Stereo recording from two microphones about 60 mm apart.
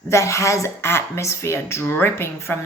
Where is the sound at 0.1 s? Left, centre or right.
Left.